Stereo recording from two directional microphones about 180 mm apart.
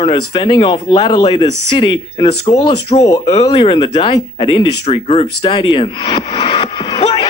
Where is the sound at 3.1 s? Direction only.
20° left (ahead or behind).